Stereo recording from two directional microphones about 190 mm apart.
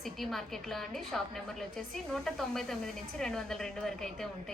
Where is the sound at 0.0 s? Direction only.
Centre (ahead or behind).